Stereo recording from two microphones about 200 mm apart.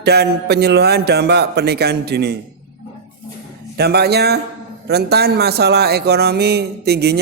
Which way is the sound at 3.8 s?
55° right (ahead or behind).